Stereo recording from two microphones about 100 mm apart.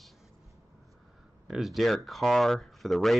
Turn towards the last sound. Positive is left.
turn(degrees=0)  # may be behind; listen again after turning